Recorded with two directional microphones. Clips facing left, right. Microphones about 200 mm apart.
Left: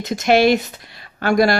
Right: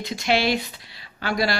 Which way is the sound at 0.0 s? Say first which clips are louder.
Left 8 dB; 45° left (ahead or behind).